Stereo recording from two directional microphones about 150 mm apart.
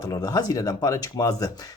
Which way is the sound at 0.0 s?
25° left (ahead or behind).